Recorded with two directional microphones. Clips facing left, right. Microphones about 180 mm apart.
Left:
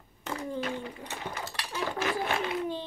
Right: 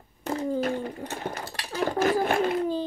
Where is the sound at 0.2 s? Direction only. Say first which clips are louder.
Right 7 dB; 35° right (ahead or behind).